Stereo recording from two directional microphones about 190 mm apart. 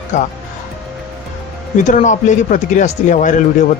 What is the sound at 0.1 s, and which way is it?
Speech, 40° left (ahead or behind).